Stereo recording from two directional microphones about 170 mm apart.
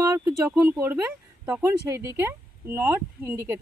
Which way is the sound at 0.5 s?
10° right (ahead or behind).